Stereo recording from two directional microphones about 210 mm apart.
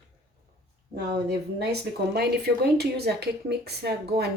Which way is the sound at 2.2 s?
50° right (ahead or behind).